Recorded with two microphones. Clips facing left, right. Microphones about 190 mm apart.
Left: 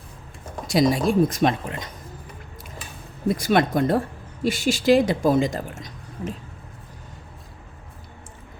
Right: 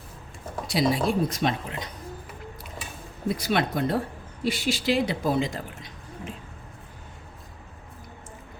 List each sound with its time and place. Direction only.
0.7 s speech: 45° left (ahead or behind)
3.2 s speech: 45° left (ahead or behind)